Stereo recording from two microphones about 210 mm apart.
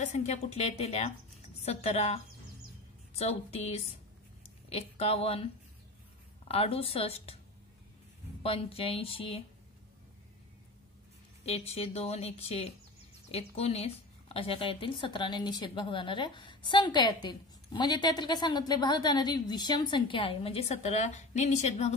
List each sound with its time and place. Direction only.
0.0 s a woman's voice: 35° left (ahead or behind)
8.4 s a woman's voice: 25° left (ahead or behind)
11.4 s a woman's voice: 30° left (ahead or behind)